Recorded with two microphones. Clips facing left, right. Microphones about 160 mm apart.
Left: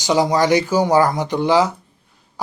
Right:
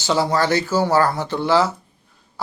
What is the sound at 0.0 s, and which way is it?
A man's voice, 15° left (ahead or behind).